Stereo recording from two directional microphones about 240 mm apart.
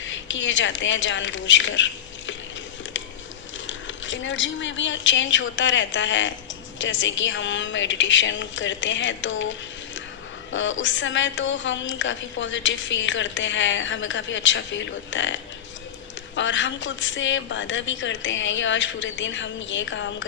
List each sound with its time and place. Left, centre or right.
0.0 s speech: left
3.7 s a woman's voice: left